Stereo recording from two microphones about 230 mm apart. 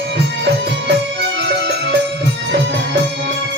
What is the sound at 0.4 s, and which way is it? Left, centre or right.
Music, right.